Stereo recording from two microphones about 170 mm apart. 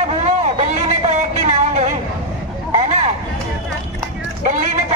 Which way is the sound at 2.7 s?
40° right (ahead or behind).